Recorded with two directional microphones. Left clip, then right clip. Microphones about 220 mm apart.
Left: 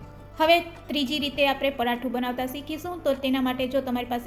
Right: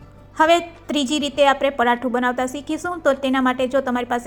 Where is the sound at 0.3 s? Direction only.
30° right (ahead or behind).